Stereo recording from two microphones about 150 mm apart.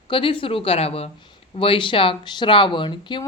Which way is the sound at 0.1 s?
35° left (ahead or behind).